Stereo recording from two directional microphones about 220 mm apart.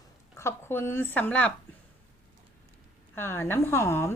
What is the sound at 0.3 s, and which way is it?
A woman's voice, 10° left (ahead or behind).